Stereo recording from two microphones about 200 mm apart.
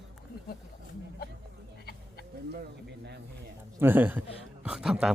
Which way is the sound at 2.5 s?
55° right (ahead or behind).